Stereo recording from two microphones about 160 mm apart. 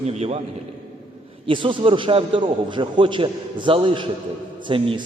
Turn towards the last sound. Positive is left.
turn(degrees=-35)  # may be behind; listen again after turning